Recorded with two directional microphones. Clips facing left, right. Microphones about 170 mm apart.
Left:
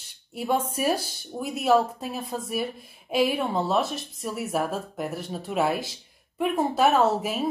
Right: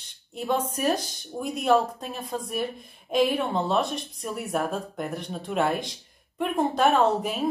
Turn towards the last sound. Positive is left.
turn(degrees=5)  # may be behind; listen again after turning